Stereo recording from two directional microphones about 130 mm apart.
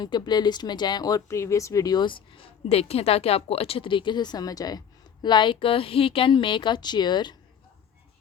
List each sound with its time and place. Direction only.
0.0 s speech: 35° left (ahead or behind)
2.6 s speech: 50° left (ahead or behind); by 7.3 s 35° left (ahead or behind)